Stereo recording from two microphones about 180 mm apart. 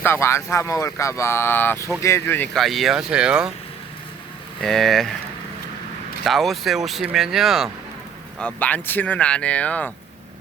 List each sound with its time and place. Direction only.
0.0 s speech: 15° left (ahead or behind); by 3.5 s 5° right (ahead or behind)
4.6 s speech: centre (ahead or behind)
6.2 s speech: centre (ahead or behind)